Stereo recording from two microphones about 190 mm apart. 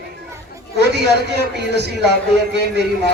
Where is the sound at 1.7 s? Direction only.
60° right (ahead or behind).